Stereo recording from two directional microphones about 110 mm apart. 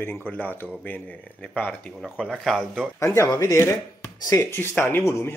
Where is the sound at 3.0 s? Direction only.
25° left (ahead or behind).